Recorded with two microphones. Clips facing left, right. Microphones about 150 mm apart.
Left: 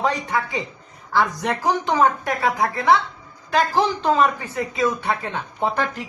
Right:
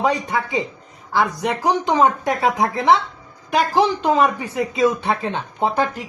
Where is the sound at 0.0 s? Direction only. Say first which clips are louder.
Right 2 dB; 20° right (ahead or behind).